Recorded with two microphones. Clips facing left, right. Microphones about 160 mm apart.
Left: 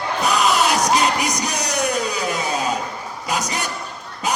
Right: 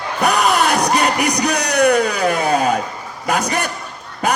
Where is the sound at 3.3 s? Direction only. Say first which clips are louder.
Right 6 dB; 55° right (ahead or behind).